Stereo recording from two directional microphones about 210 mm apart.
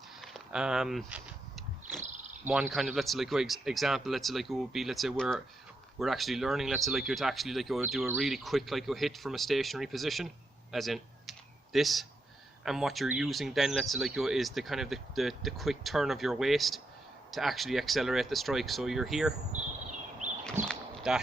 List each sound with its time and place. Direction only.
0.2 s a sound: centre (ahead or behind)
2.4 s speech: 5° right (ahead or behind)
20.7 s clip-clop: 5° right (ahead or behind)